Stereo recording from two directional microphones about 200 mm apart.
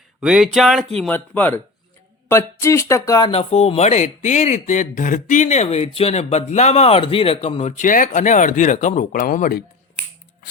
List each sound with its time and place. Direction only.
0.2 s speech: centre (ahead or behind); by 9.6 s 45° left (ahead or behind)